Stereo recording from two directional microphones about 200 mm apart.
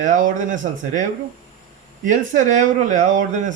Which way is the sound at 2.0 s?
40° right (ahead or behind).